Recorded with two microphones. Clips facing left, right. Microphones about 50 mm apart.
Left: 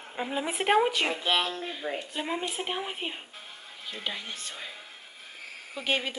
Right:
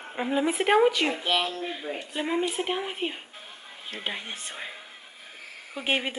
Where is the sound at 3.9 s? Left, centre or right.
Right.